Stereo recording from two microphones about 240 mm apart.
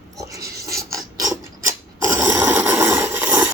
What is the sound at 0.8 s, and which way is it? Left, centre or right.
Mechanisms, centre.